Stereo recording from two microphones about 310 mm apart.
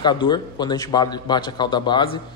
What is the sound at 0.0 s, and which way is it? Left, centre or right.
A man's voice, centre.